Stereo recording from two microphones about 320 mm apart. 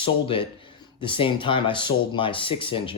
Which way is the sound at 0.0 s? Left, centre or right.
Centre.